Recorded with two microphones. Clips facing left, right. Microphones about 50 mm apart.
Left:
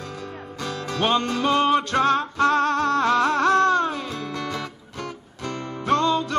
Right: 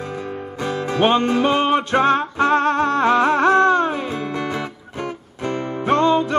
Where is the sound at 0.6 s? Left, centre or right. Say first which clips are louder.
Right 6 dB; right.